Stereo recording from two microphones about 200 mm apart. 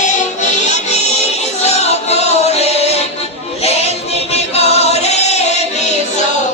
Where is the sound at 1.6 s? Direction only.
35° left (ahead or behind).